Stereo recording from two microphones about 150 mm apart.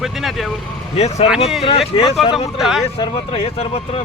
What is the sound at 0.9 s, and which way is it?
Speech, 45° left (ahead or behind).